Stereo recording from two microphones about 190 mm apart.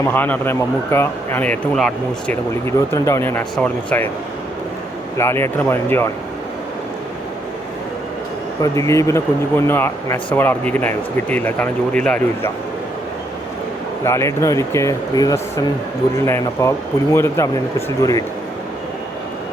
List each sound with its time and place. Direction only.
0.0 s speech: 10° left (ahead or behind)
5.1 s speech: 15° left (ahead or behind)
8.6 s speech: 15° left (ahead or behind)
14.0 s speech: 15° left (ahead or behind)